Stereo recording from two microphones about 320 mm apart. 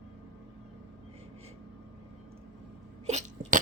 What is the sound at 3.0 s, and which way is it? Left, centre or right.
Sneeze, right.